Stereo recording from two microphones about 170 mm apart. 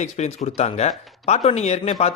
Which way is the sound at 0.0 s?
40° left (ahead or behind).